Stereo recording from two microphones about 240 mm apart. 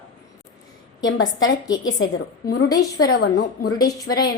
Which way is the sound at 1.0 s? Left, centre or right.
Left.